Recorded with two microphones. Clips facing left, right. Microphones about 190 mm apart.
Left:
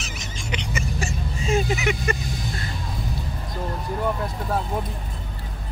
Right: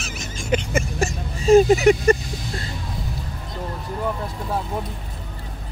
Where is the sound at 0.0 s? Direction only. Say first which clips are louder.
Right 3 dB; 50° right (ahead or behind).